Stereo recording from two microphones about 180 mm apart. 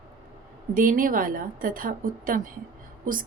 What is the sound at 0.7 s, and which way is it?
A woman's voice, 50° right (ahead or behind).